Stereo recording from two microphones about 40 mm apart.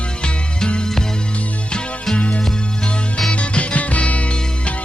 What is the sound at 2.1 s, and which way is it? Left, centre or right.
Music, left.